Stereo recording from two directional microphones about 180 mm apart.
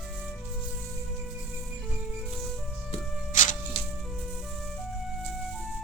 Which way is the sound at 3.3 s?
45° left (ahead or behind).